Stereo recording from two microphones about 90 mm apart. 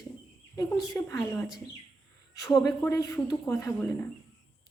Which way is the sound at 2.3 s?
40° left (ahead or behind).